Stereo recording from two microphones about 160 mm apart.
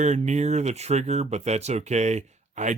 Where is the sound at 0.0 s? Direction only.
45° right (ahead or behind).